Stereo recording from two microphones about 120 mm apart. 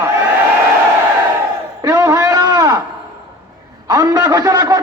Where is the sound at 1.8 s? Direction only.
30° right (ahead or behind).